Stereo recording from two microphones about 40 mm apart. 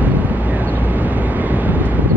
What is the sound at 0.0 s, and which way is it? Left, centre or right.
Vehicle, right.